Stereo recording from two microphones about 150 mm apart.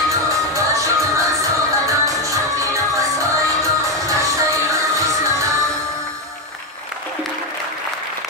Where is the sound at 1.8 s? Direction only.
20° right (ahead or behind).